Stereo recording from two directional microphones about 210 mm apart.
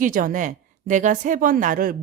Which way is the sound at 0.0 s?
40° right (ahead or behind).